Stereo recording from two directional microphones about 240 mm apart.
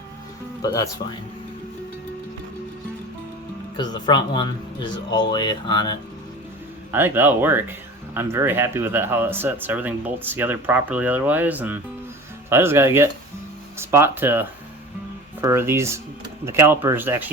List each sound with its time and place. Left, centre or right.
0.6 s speech: centre
3.8 s speech: centre
6.9 s speech: centre